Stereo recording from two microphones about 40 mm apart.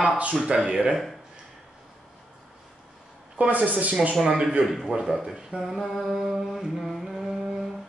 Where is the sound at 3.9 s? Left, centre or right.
Right.